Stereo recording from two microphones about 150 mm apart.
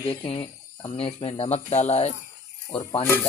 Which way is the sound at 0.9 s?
35° left (ahead or behind).